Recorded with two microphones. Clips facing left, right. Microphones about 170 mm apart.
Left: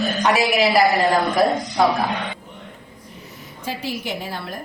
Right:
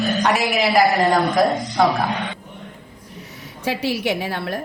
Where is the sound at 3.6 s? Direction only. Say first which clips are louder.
Right 6 dB; 70° right (ahead or behind).